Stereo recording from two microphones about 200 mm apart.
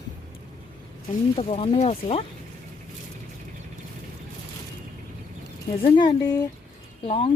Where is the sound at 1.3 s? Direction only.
30° left (ahead or behind).